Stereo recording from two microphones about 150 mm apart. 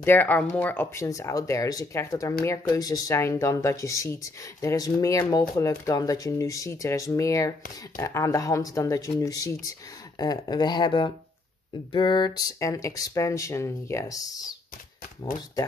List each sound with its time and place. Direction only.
0.0 s speech: 10° left (ahead or behind)